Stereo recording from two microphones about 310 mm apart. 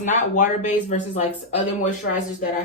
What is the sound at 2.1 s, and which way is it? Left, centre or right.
Speech, left.